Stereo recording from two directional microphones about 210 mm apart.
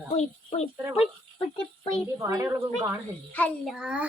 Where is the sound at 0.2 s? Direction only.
30° left (ahead or behind).